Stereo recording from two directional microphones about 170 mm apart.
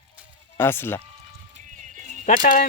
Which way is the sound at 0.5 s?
15° left (ahead or behind).